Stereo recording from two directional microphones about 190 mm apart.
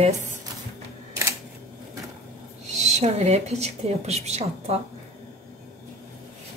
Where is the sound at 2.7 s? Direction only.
35° right (ahead or behind).